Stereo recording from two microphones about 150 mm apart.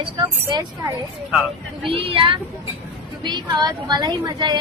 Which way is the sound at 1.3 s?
Centre (ahead or behind).